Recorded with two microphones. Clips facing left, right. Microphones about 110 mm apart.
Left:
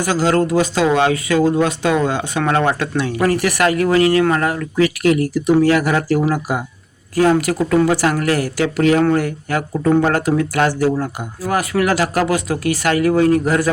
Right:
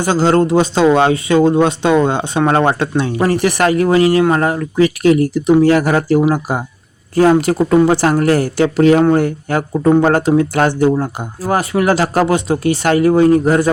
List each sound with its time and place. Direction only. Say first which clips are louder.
0.0 s speech: right 3 dB; 30° right (ahead or behind)